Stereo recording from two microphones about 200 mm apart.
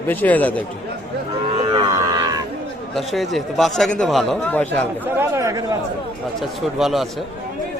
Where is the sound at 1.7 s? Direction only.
20° right (ahead or behind).